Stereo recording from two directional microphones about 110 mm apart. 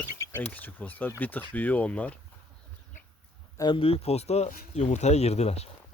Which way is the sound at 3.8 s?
60° left (ahead or behind).